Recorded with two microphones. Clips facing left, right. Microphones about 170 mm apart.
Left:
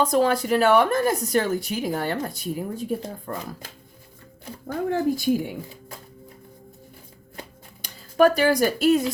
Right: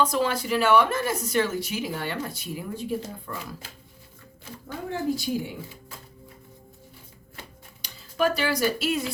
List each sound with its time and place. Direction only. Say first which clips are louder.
0.0 s speech: left 4 dB; 45° left (ahead or behind)
4.6 s speech: left 6 dB; 50° left (ahead or behind)
7.3 s a sound: left 5 dB; 45° left (ahead or behind)